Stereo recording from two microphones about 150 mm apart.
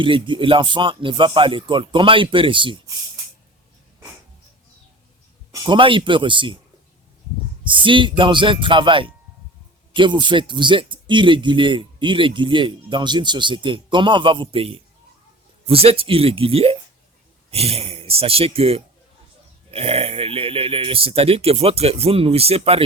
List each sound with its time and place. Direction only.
0.0 s speech: 35° right (ahead or behind)
5.5 s speech: 30° right (ahead or behind)
7.6 s speech: 35° right (ahead or behind)